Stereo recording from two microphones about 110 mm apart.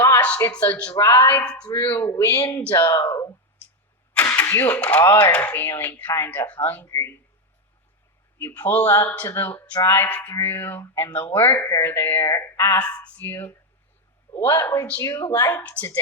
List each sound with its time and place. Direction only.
0.0 s a sound: 15° left (ahead or behind)
0.5 s speech: 15° left (ahead or behind)
0.9 s speech: 30° left (ahead or behind)
1.3 s speech: 10° left (ahead or behind); by 2.6 s 40° left (ahead or behind)
2.7 s speech: 25° left (ahead or behind)
4.1 s speech: 20° left (ahead or behind)
8.4 s speech: 25° left (ahead or behind)
12.8 s speech: 10° left (ahead or behind)
15.5 s speech: 15° left (ahead or behind)